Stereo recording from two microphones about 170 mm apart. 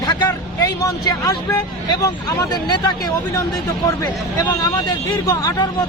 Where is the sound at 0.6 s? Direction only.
20° left (ahead or behind).